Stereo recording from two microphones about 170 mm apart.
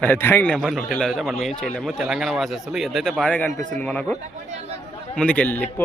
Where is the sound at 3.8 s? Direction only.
10° left (ahead or behind).